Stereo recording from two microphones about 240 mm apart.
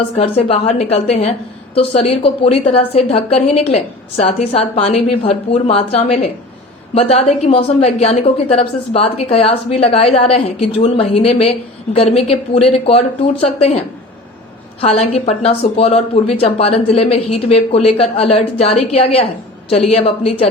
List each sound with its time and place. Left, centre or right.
0.2 s a woman's voice: left
14.8 s a woman's voice: left